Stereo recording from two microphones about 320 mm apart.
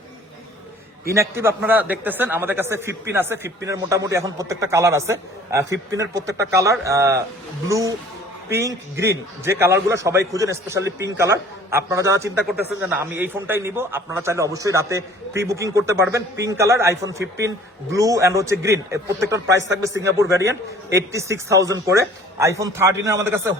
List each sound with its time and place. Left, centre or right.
1.1 s speech: centre
19.5 s a man's voice: right
19.8 s speech: centre